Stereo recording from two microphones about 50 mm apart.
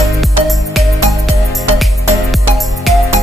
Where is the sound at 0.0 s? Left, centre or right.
Centre.